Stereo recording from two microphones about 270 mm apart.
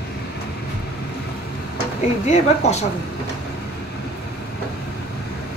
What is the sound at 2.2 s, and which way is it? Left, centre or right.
Speech, left.